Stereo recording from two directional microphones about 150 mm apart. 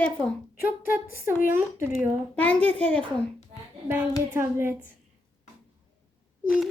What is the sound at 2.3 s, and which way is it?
Speech, 10° left (ahead or behind).